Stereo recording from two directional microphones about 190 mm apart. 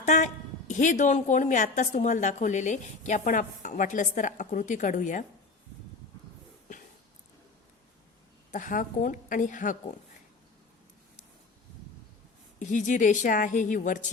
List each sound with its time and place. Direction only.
0.0 s a sound: 40° left (ahead or behind)
0.7 s a woman's voice: 40° left (ahead or behind)
8.5 s a woman's voice: 45° left (ahead or behind)
12.5 s a woman's voice: 40° left (ahead or behind)